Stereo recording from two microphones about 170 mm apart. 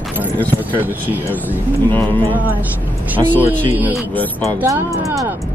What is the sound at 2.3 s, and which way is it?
Speech, 10° right (ahead or behind).